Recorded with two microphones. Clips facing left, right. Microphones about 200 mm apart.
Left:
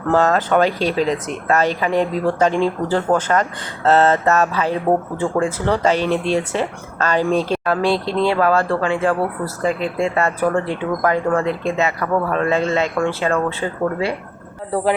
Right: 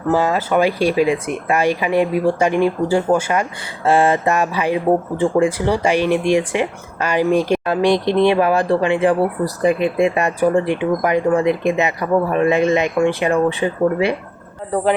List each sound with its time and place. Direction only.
0.1 s speech: 10° right (ahead or behind)